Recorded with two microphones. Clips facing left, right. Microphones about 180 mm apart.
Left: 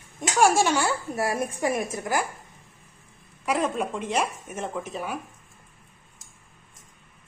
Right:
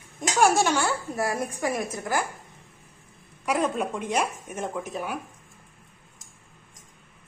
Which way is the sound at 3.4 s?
Centre (ahead or behind).